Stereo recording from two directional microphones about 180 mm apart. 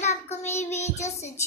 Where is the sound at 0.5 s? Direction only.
15° left (ahead or behind).